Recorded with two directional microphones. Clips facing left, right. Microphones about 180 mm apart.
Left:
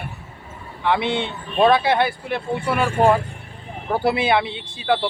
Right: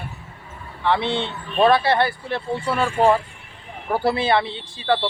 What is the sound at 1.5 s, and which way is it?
Speech, centre (ahead or behind).